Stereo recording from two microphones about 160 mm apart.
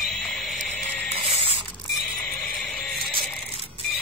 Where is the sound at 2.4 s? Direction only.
Centre (ahead or behind).